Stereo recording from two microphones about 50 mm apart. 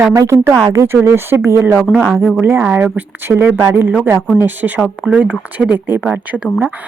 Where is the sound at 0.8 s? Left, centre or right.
Right.